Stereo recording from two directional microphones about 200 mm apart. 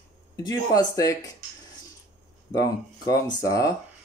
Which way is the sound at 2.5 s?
20° left (ahead or behind).